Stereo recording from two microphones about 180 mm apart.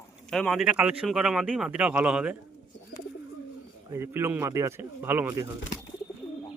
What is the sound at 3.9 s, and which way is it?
Speech, 15° right (ahead or behind).